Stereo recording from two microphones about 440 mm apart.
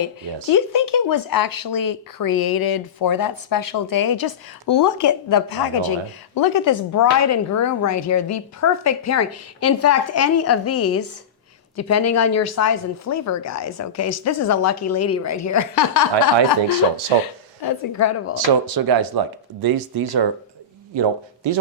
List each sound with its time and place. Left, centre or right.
0.5 s speech: left
17.6 s speech: left
18.3 s speech: right
20.9 s speech: right